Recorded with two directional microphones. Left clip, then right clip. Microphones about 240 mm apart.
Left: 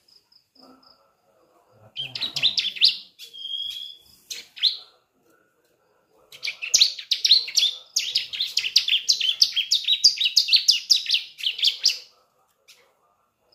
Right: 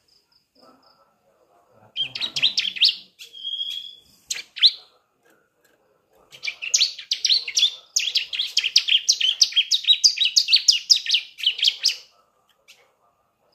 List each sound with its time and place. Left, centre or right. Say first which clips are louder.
2.0 s bird: right 3 dB; centre
6.4 s bird: left 2 dB; centre
7.9 s chirp: right 2 dB; centre